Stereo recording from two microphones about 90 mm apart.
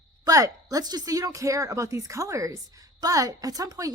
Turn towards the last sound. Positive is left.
turn(degrees=-40)  # may be behind; listen again after turning